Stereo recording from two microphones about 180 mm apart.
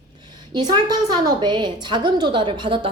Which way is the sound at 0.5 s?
25° right (ahead or behind).